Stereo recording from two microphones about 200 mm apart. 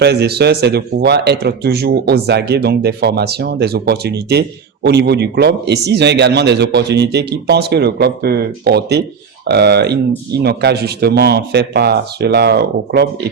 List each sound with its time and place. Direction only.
0.0 s speech: 55° right (ahead or behind)